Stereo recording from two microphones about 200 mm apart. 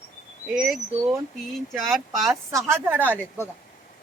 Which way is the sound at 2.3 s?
15° right (ahead or behind).